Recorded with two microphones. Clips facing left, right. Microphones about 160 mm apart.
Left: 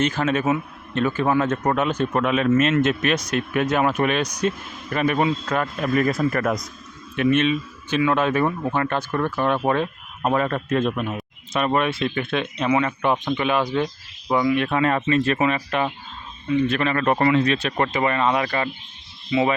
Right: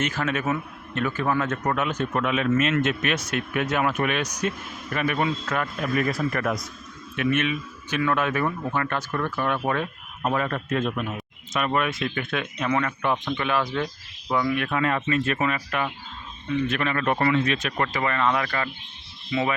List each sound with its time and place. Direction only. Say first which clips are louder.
0.0 s speech: left 5 dB; 30° left (ahead or behind)
7.2 s speech: left 5 dB; 30° left (ahead or behind)